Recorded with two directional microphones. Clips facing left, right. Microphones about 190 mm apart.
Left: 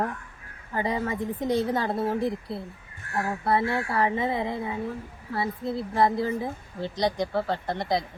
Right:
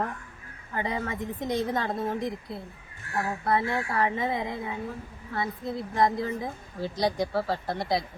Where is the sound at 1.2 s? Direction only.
10° left (ahead or behind).